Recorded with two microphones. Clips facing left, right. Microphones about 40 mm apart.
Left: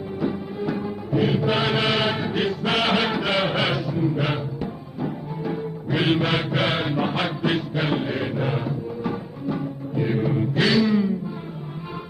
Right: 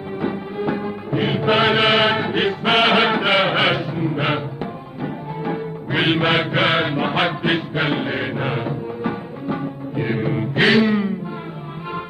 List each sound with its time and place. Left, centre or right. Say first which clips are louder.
0.2 s music: right 3 dB; right